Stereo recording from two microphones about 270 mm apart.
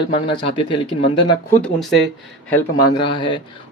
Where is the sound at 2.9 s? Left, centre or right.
Centre.